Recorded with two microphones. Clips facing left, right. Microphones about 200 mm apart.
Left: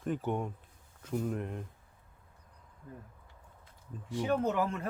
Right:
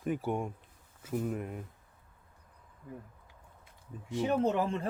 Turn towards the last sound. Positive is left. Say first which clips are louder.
# right 2 dB
turn(degrees=-30)  # may be behind; listen again after turning